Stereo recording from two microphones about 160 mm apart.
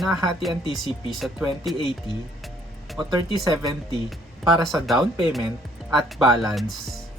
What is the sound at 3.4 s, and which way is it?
Speech, 25° right (ahead or behind).